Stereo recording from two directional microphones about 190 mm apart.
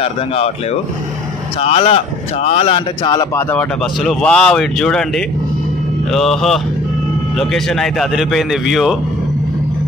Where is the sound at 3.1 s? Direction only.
20° left (ahead or behind).